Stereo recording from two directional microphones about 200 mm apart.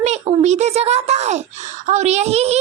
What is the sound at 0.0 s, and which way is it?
A child's voice, 35° right (ahead or behind).